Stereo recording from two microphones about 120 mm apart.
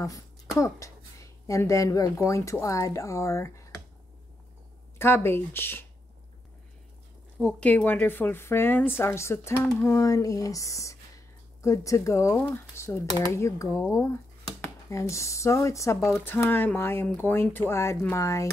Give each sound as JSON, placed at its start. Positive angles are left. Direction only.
{"t": 0.6, "sound": "speech", "side_deg": 25}
{"t": 4.9, "sound": "speech", "side_deg": 20}
{"t": 7.4, "sound": "speech", "side_deg": 10}